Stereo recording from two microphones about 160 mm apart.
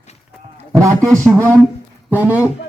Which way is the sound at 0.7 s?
20° right (ahead or behind).